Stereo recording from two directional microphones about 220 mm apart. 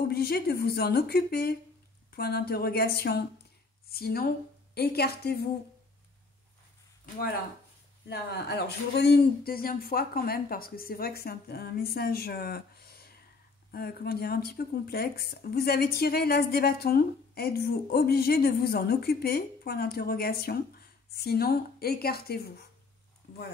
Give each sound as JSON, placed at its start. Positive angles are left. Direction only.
{"t": 0.1, "sound": "speech", "side_deg": 45}
{"t": 8.1, "sound": "speech", "side_deg": 45}